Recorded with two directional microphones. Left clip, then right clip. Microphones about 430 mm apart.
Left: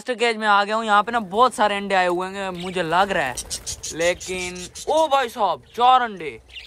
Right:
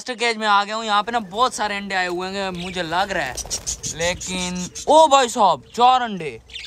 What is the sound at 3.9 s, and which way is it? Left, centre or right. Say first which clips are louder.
Speech: left 2 dB; centre.